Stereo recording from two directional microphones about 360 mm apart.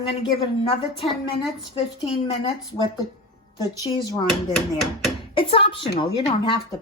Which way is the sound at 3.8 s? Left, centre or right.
Centre.